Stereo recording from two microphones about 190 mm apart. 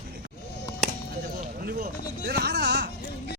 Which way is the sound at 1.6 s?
55° right (ahead or behind).